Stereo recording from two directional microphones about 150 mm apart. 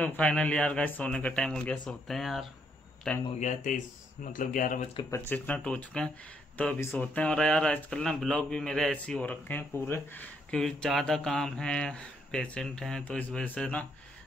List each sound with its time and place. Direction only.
0.0 s a man's voice: 10° left (ahead or behind)
3.3 s speech: 55° left (ahead or behind)
5.1 s a man's voice: 15° left (ahead or behind)